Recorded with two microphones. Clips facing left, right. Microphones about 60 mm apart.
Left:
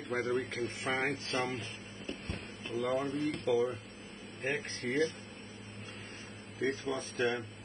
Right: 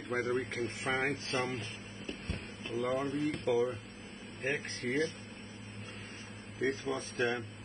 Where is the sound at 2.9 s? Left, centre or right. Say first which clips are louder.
Even; right.